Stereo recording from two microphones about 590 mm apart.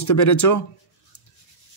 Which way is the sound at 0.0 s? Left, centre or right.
Left.